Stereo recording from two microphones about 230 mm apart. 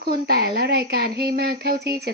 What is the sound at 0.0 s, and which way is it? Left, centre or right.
Speech, right.